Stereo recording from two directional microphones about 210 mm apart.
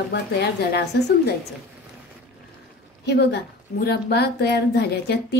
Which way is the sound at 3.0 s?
50° left (ahead or behind).